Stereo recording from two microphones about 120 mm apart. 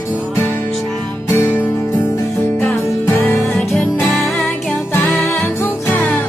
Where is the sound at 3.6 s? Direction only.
Centre (ahead or behind).